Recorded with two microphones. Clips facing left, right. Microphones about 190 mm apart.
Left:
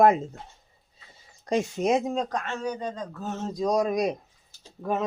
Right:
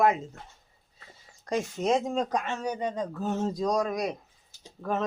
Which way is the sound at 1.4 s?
15° left (ahead or behind).